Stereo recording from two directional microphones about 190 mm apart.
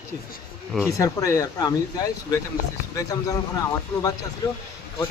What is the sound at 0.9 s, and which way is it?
Speech, 15° left (ahead or behind).